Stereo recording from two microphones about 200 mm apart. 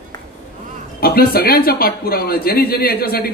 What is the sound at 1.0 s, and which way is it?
A man's voice, 50° left (ahead or behind).